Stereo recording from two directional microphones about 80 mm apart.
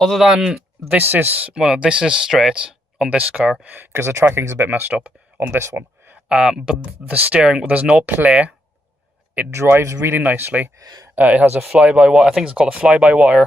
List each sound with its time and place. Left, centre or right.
0.0 s speech: centre
0.9 s speech: right
1.5 s speech: centre
3.7 s speech: right
6.2 s speech: centre
7.1 s speech: centre
9.5 s speech: right
10.8 s speech: right
11.1 s speech: centre